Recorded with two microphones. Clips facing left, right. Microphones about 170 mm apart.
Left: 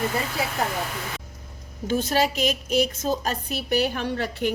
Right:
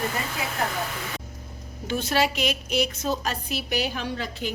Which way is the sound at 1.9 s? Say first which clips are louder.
Left 2 dB; 45° left (ahead or behind).